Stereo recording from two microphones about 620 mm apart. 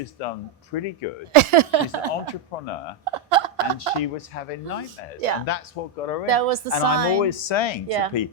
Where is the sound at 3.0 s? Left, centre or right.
Right.